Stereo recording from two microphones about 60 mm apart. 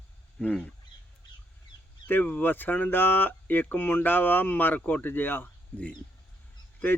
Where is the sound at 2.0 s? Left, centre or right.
Left.